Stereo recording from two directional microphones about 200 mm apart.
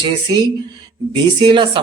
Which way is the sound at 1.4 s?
25° right (ahead or behind).